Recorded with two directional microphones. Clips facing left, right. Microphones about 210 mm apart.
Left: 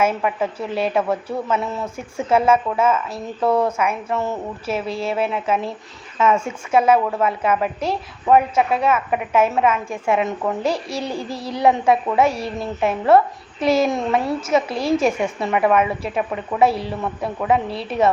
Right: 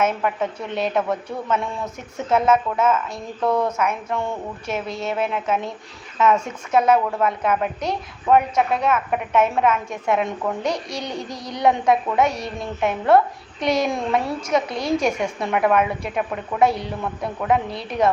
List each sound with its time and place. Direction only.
0.0 s a woman's voice: 5° left (ahead or behind)
11.0 s speech: 30° left (ahead or behind)
11.6 s a woman's voice: 5° left (ahead or behind)
17.7 s speech: 30° left (ahead or behind)